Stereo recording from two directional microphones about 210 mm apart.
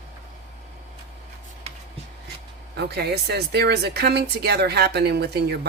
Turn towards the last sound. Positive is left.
turn(degrees=-50)  # may be behind; listen again after turning